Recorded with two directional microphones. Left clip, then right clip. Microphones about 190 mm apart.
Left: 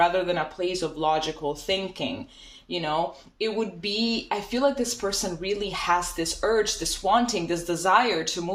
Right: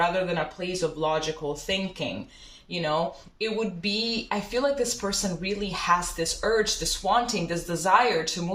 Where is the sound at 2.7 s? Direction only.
50° left (ahead or behind).